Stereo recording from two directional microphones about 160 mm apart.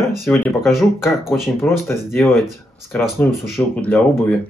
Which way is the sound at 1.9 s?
15° left (ahead or behind).